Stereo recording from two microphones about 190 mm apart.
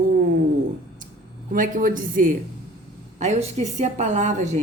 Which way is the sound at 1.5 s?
45° right (ahead or behind).